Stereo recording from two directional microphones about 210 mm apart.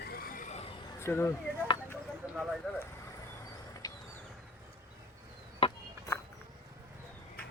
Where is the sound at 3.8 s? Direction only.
20° left (ahead or behind).